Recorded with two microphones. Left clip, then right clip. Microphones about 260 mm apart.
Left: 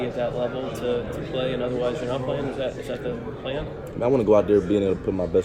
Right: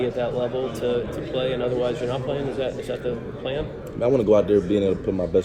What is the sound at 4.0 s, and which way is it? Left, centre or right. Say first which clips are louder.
Speech: right 1 dB; centre.